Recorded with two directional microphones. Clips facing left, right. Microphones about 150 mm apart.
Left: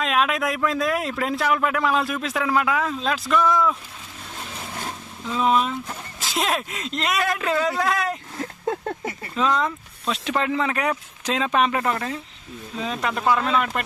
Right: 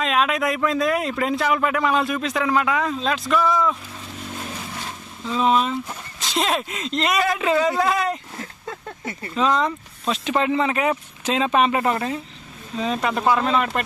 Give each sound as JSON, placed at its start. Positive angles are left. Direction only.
{"t": 0.0, "sound": "speech", "side_deg": 0}
{"t": 5.3, "sound": "speech", "side_deg": 0}
{"t": 8.6, "sound": "a sound", "side_deg": 45}
{"t": 9.3, "sound": "speech", "side_deg": 0}
{"t": 12.8, "sound": "speech", "side_deg": 0}